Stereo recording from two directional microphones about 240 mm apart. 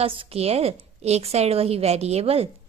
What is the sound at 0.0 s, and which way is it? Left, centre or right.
A woman's voice, right.